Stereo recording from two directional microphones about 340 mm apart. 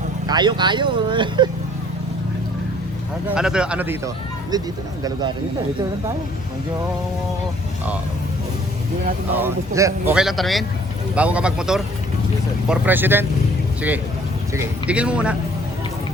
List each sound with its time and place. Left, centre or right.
0.3 s speech: centre
3.2 s speech: centre
9.3 s speech: centre
14.5 s speech: centre